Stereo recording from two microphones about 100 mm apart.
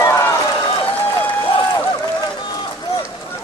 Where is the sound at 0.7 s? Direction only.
55° left (ahead or behind).